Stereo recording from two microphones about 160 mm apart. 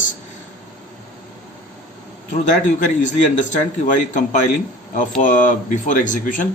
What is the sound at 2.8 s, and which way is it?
Speech, 50° left (ahead or behind).